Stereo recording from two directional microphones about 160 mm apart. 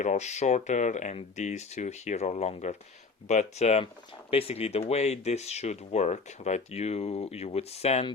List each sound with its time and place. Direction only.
0.0 s speech: 45° left (ahead or behind)